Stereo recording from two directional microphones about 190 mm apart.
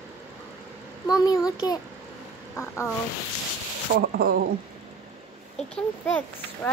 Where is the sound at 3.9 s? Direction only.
65° right (ahead or behind).